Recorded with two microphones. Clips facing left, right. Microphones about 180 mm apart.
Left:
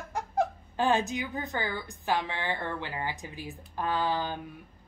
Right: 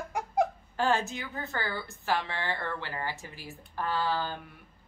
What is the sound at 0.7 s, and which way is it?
A woman's voice, 15° left (ahead or behind).